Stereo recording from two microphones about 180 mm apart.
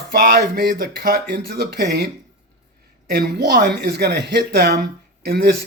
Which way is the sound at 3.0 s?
60° right (ahead or behind).